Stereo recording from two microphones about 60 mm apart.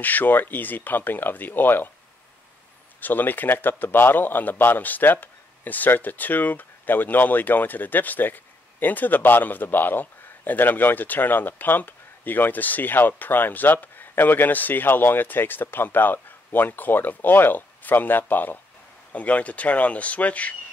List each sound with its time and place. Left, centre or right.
0.0 s a man's voice: left
3.0 s a man's voice: left